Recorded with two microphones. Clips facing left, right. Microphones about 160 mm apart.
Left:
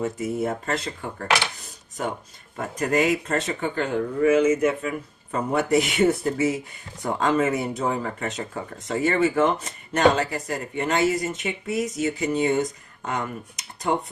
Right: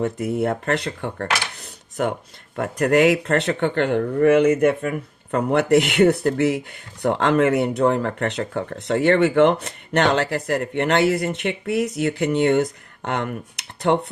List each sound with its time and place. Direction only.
0.0 s speech: 60° right (ahead or behind)